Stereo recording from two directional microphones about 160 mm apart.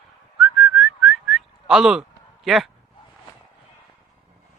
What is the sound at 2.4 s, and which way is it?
Speech, centre (ahead or behind).